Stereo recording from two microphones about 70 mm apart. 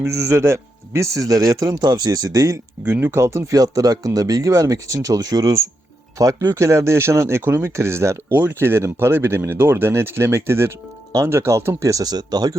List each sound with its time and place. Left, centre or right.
0.0 s a man's voice: right
2.8 s speech: right
3.5 s a man's voice: right
6.6 s speech: right
8.3 s speech: right